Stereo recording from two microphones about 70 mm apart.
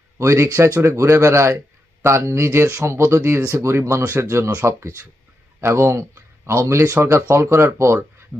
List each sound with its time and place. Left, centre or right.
0.2 s speech: right